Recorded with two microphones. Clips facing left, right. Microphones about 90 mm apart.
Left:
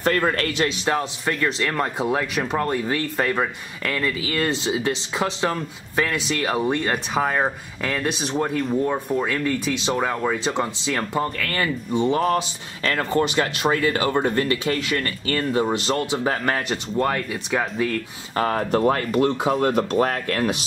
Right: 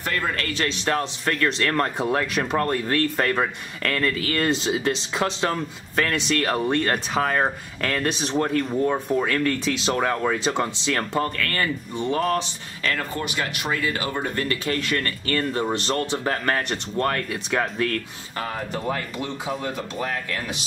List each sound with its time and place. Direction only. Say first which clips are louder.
0.0 s speech: left 6 dB; 35° left (ahead or behind)
0.5 s speech: left 2 dB; 15° left (ahead or behind)
11.4 s speech: left 1 dB; 20° left (ahead or behind)
12.8 s speech: left 6 dB; 30° left (ahead or behind); by 18.0 s 10° left (ahead or behind)
18.3 s speech: left 8 dB; 45° left (ahead or behind)